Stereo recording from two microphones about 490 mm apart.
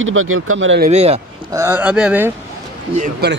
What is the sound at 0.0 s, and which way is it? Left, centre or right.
A man's voice, right.